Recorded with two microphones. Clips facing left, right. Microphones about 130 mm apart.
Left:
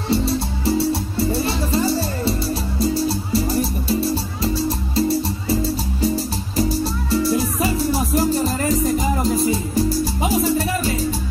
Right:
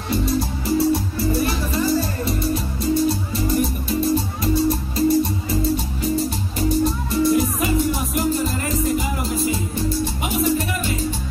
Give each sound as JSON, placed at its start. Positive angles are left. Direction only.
{"t": 0.1, "sound": "music", "side_deg": 30}